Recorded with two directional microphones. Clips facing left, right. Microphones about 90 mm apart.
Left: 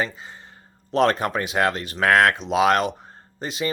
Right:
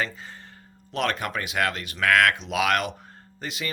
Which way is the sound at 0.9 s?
30° left (ahead or behind).